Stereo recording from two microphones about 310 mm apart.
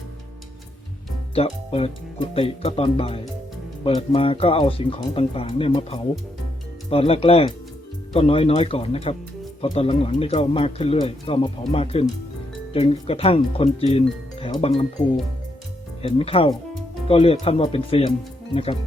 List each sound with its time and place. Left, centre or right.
1.4 s speech: centre
16.0 s speech: centre